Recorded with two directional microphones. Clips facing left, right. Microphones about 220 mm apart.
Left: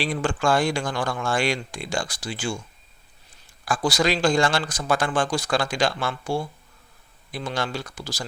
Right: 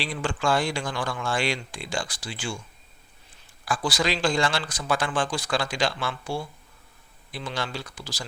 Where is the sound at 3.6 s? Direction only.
45° left (ahead or behind).